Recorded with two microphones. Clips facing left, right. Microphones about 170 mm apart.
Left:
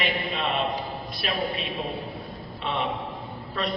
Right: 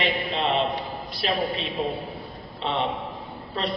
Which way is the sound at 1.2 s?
30° right (ahead or behind).